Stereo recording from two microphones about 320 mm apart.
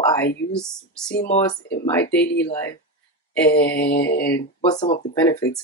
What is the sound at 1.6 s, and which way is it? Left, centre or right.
Speech, left.